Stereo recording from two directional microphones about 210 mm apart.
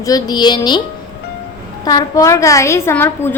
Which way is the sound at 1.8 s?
20° left (ahead or behind).